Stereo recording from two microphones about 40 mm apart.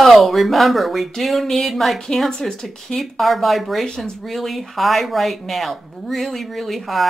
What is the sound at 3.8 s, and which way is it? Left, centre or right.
Speech, centre.